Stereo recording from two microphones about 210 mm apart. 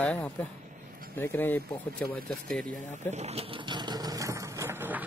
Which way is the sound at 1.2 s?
10° left (ahead or behind).